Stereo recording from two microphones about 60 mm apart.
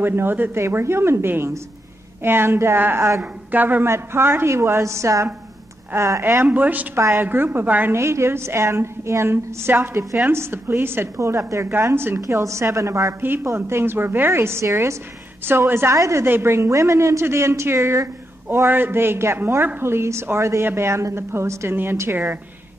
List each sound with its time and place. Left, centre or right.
0.0 s a woman's voice: right
3.2 s a woman's voice: right
3.8 s a woman's voice: right
6.4 s a woman's voice: right
7.9 s a woman's voice: right
11.1 s a woman's voice: right
11.6 s speech: right
12.2 s a woman's voice: right
13.2 s a woman's voice: right
16.0 s a woman's voice: right
16.3 s a woman's voice: right
18.0 s a sound: right
18.7 s a woman's voice: right